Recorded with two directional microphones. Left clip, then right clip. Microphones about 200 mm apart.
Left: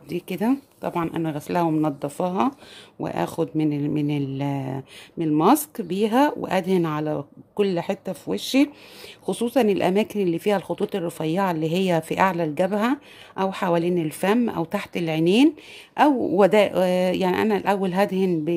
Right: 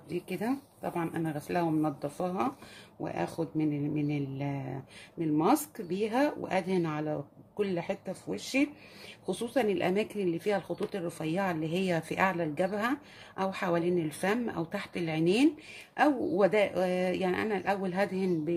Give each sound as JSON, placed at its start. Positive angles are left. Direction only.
{"t": 0.1, "sound": "speech", "side_deg": 45}